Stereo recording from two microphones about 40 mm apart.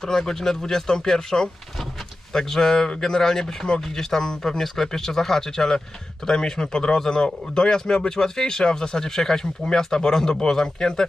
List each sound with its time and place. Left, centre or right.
0.0 s a man's voice: centre